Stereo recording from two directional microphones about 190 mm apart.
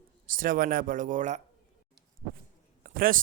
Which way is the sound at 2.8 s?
45° right (ahead or behind).